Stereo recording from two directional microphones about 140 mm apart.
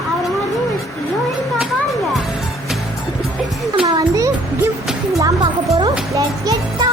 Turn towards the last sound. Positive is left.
turn(degrees=-25)  # may be behind; listen again after turning